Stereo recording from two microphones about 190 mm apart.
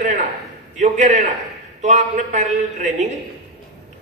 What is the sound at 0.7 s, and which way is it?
A man's voice, 40° right (ahead or behind).